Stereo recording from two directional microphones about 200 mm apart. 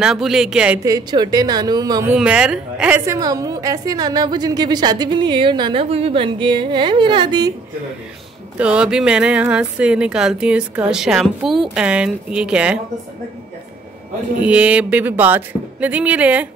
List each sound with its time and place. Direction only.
0.0 s speech: centre (ahead or behind)
0.8 s a woman's voice: 20° right (ahead or behind)
2.1 s speech: 5° right (ahead or behind)
3.2 s a woman's voice: 20° right (ahead or behind)
8.5 s speech: 5° right (ahead or behind)
14.4 s speech: 5° right (ahead or behind)